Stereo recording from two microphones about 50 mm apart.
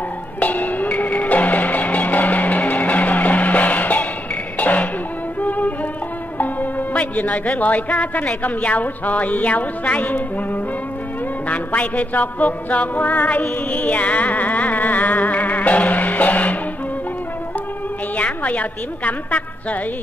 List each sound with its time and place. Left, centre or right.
0.4 s music: left
18.1 s a woman's voice: left